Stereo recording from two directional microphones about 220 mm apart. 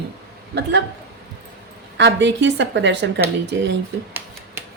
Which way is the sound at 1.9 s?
55° right (ahead or behind).